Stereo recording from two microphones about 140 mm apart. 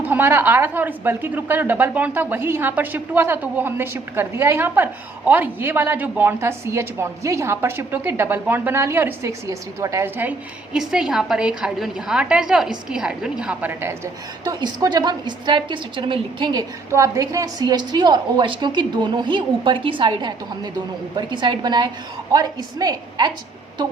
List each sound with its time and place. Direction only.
0.0 s a woman's voice: 15° right (ahead or behind)
14.4 s a woman's voice: 30° right (ahead or behind)